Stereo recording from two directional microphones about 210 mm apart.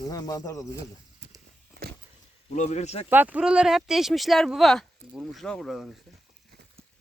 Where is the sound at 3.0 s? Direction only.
10° right (ahead or behind).